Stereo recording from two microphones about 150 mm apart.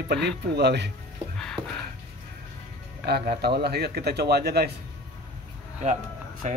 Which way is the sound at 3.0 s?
90° right.